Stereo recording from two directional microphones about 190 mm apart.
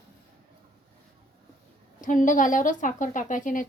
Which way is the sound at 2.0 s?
45° left (ahead or behind).